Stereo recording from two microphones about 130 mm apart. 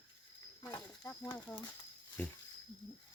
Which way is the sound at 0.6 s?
25° left (ahead or behind).